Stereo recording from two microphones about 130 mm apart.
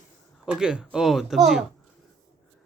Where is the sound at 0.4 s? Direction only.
5° right (ahead or behind).